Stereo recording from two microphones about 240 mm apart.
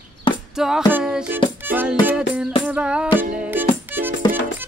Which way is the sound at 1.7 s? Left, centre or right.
Centre.